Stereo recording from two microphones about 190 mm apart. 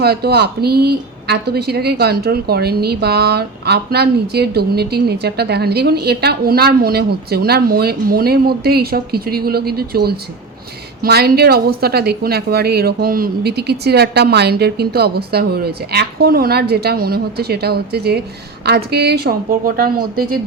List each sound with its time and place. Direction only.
0.0 s a woman's voice: 55° right (ahead or behind)